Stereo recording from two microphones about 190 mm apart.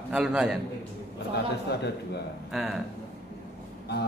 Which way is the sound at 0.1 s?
5° right (ahead or behind).